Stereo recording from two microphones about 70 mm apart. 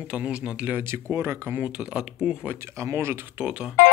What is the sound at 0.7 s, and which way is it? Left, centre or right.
Speech, right.